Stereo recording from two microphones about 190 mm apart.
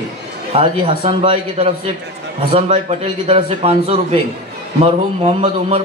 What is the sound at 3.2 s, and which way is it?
A man's voice, 30° right (ahead or behind).